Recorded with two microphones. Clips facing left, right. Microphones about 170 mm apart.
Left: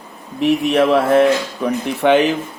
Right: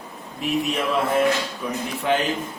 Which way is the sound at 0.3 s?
70° left (ahead or behind).